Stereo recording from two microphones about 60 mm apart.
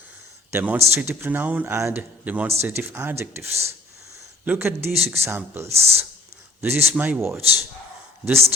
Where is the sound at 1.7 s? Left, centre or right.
Right.